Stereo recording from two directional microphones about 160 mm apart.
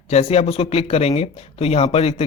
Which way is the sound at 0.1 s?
40° left (ahead or behind).